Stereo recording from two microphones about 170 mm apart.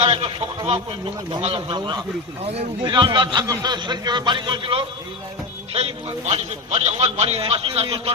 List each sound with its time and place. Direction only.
0.0 s a man's voice: 35° right (ahead or behind)